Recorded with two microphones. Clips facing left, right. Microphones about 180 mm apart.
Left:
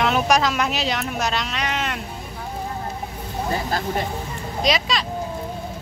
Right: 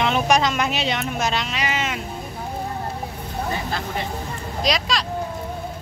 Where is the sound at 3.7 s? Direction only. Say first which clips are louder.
Left 3 dB; 40° left (ahead or behind).